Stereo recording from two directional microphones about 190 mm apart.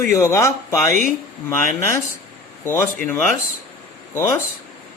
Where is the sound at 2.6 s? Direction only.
10° left (ahead or behind).